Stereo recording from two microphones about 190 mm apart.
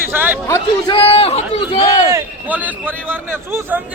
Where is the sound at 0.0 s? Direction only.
10° right (ahead or behind).